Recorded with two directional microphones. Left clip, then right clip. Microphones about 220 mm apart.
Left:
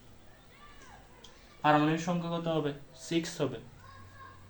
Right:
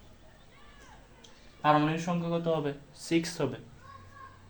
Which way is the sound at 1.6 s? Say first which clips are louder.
Right 1 dB; 15° right (ahead or behind).